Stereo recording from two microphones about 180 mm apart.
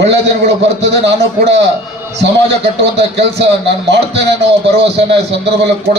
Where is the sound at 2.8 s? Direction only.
75° right (ahead or behind).